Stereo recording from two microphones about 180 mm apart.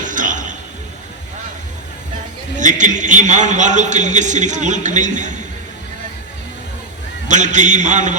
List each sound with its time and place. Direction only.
0.0 s a sound: 45° right (ahead or behind)
2.6 s a man's voice: 45° right (ahead or behind)
7.3 s a man's voice: 40° right (ahead or behind)